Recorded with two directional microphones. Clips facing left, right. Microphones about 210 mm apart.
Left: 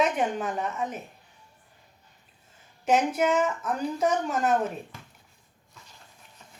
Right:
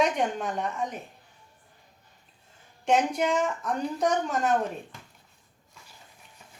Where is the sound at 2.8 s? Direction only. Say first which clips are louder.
Left 1 dB; 5° left (ahead or behind).